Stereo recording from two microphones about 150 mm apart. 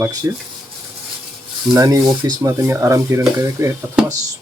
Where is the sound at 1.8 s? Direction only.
20° right (ahead or behind).